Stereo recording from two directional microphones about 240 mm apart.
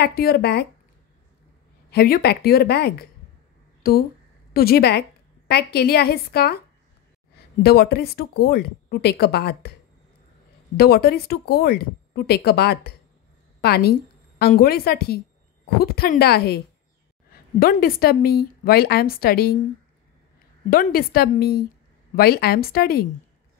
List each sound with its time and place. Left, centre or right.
0.0 s speech: left
1.9 s speech: left
7.6 s speech: left
10.8 s a woman's voice: left
20.7 s speech: left